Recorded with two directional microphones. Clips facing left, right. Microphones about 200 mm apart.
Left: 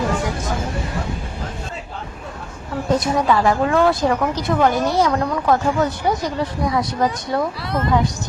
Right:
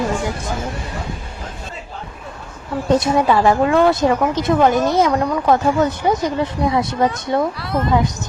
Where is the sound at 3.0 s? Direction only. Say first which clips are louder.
Right 2 dB; 25° right (ahead or behind).